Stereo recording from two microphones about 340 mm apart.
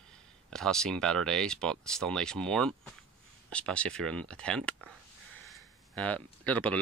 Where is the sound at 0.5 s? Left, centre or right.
Centre.